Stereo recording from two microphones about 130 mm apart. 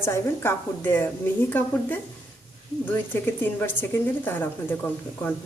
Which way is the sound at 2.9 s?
15° left (ahead or behind).